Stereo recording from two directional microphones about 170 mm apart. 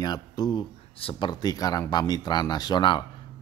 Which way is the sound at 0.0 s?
25° left (ahead or behind).